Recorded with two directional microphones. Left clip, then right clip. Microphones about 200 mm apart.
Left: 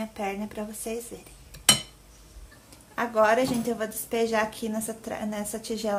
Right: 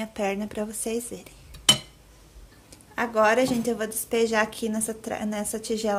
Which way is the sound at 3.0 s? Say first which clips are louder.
Right 1 dB; 20° right (ahead or behind).